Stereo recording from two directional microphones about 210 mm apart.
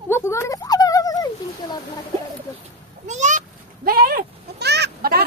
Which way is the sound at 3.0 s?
35° right (ahead or behind).